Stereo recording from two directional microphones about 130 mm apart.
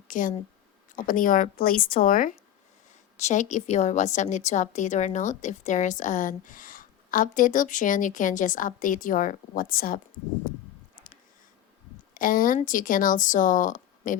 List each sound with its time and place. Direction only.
0.1 s speech: 90° left
3.2 s a woman's voice: 65° left (ahead or behind); by 10.0 s 90° left
12.1 s speech: 90° left